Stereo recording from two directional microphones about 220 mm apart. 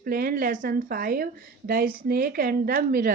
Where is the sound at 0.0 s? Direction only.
40° right (ahead or behind).